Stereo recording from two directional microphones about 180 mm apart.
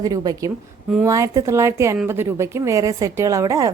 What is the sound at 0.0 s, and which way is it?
A woman's voice, 20° right (ahead or behind).